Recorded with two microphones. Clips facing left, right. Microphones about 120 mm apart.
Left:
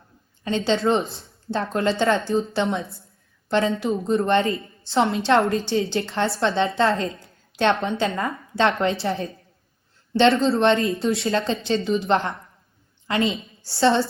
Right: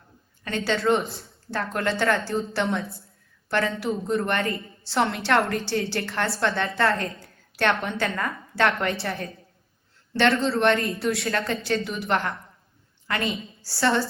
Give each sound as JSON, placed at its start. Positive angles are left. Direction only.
{"t": 0.4, "sound": "a woman's voice", "side_deg": 20}